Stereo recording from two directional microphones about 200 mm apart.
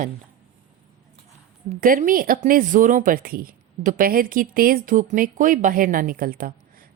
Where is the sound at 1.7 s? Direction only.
40° right (ahead or behind).